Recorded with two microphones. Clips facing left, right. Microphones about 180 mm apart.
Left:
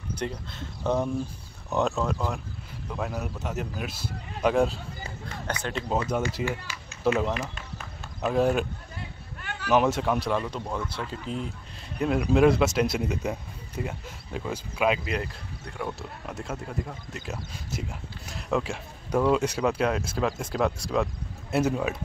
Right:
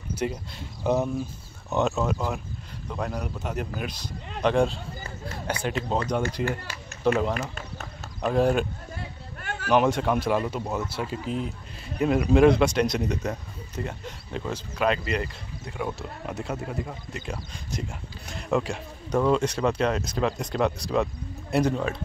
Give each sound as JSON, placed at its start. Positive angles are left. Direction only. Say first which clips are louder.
{"t": 0.1, "sound": "speech", "louder": "right 3 dB", "side_deg": -5}
{"t": 5.6, "sound": "speech", "louder": "right 5 dB", "side_deg": -10}
{"t": 5.9, "sound": "speech", "louder": "left 1 dB", "side_deg": 5}
{"t": 9.7, "sound": "speech", "louder": "right 1 dB", "side_deg": 0}